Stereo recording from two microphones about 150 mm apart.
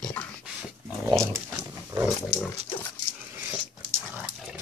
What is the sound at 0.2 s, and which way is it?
Dog, 15° left (ahead or behind).